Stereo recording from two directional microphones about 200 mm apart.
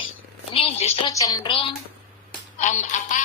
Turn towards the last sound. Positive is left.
turn(degrees=35)  # may be behind; listen again after turning